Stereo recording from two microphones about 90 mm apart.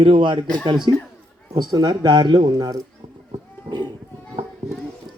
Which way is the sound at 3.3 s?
55° right (ahead or behind).